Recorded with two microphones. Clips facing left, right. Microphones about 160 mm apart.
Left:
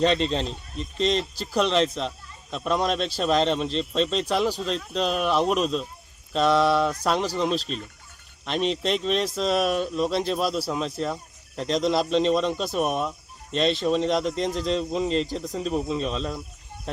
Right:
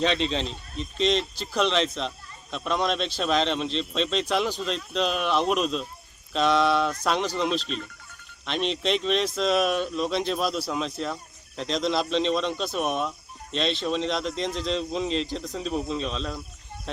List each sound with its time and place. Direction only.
0.0 s a man's voice: 5° left (ahead or behind)